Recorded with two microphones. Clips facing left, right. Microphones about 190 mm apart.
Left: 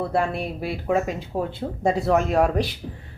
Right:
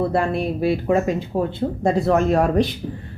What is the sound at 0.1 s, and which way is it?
Speech, 5° left (ahead or behind).